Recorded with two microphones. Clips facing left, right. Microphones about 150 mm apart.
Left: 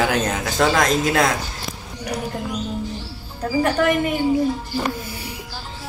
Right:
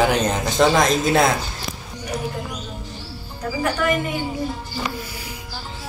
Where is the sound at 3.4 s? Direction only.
30° left (ahead or behind).